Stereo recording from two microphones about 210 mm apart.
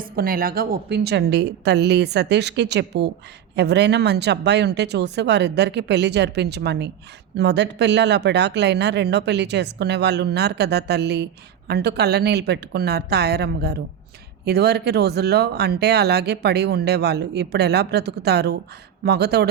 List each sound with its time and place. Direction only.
0.0 s speech: 45° right (ahead or behind)